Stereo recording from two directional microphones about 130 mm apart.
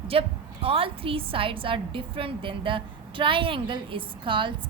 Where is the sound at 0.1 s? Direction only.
45° right (ahead or behind).